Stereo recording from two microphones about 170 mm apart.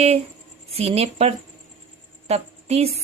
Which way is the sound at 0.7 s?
35° right (ahead or behind).